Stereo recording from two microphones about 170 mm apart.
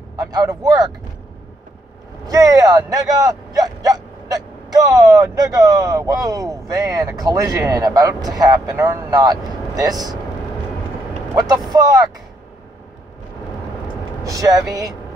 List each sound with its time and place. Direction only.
0.1 s speech: 20° right (ahead or behind)
2.2 s speech: 20° right (ahead or behind)
11.3 s speech: 25° right (ahead or behind)
14.2 s speech: 20° right (ahead or behind)